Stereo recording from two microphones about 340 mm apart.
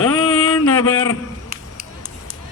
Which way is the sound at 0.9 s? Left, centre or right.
Left.